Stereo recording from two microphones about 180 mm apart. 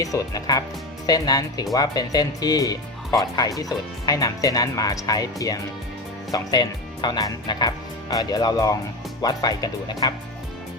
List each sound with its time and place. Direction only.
0.0 s speech: 20° left (ahead or behind)